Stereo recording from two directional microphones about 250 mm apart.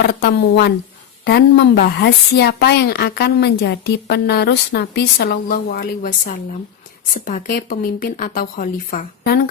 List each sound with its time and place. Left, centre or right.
0.2 s a woman's voice: left